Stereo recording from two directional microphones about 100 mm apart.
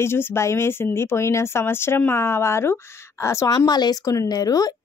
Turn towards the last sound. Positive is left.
turn(degrees=40)  # may be behind; listen again after turning